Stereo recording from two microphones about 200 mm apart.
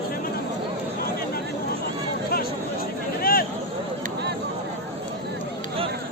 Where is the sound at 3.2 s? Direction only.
45° left (ahead or behind).